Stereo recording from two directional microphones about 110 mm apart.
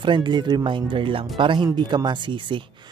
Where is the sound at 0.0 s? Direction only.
45° right (ahead or behind).